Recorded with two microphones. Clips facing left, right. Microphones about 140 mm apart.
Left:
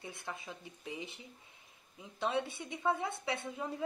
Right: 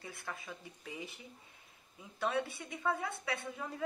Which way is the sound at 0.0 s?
25° left (ahead or behind).